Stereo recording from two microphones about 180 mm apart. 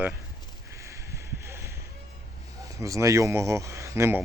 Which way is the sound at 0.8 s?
15° right (ahead or behind).